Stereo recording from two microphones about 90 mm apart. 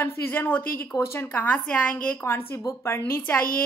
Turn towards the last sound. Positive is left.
turn(degrees=20)  # may be behind; listen again after turning